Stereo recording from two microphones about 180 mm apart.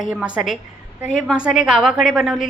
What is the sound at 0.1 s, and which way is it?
A woman's voice, 5° right (ahead or behind).